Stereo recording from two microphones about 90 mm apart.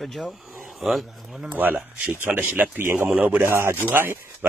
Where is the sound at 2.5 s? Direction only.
20° right (ahead or behind).